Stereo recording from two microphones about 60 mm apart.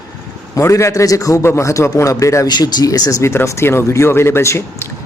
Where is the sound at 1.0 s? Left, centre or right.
Left.